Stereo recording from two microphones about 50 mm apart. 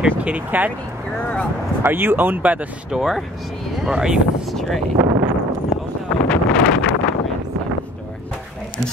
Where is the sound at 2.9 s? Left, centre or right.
Centre.